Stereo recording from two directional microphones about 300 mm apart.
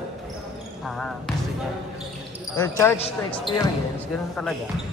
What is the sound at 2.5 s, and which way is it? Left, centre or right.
Speech, centre.